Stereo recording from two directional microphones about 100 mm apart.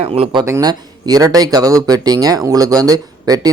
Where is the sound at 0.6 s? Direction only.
40° right (ahead or behind).